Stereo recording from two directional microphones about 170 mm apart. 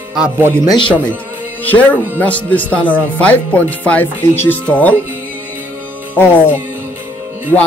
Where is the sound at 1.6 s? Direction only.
10° left (ahead or behind).